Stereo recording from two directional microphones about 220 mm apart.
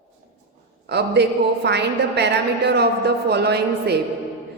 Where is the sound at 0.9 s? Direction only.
50° right (ahead or behind).